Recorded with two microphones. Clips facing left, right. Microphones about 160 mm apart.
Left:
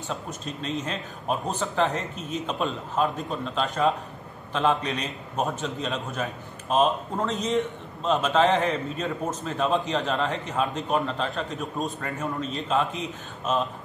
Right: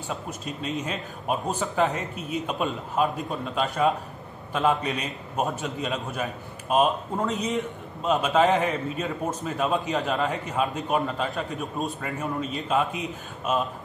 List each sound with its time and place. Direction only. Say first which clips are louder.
0.1 s a man's voice: even; 5° right (ahead or behind)